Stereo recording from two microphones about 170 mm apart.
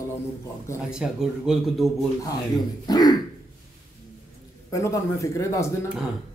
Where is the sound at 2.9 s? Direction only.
25° left (ahead or behind).